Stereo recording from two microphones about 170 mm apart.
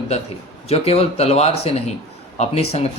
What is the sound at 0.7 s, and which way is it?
Speech, 35° left (ahead or behind).